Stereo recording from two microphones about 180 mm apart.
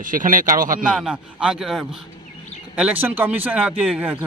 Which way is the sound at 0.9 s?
5° right (ahead or behind).